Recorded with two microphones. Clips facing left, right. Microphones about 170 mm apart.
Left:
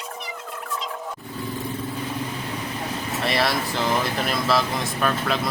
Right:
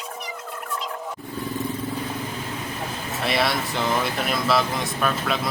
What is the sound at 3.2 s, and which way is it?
Speech, centre (ahead or behind).